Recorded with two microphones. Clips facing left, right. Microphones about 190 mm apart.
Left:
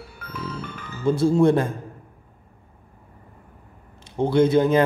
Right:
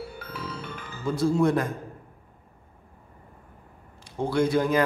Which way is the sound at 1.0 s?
25° left (ahead or behind).